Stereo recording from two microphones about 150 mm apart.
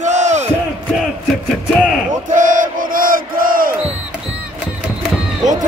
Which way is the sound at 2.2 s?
60° right (ahead or behind).